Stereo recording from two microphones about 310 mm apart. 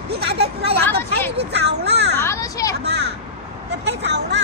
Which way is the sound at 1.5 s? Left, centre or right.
Right.